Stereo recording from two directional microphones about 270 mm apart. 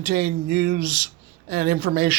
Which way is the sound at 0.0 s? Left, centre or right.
Right.